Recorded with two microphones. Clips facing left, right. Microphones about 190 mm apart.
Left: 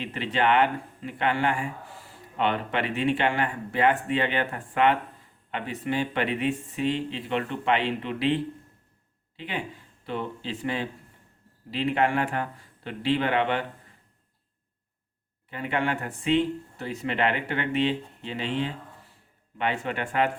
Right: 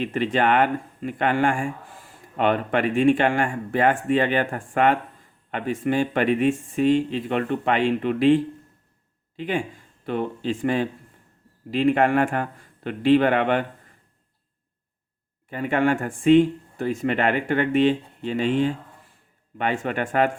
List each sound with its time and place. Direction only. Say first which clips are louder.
0.0 s speech: right 4 dB; 50° right (ahead or behind)
15.4 s speech: right 7 dB; 45° right (ahead or behind)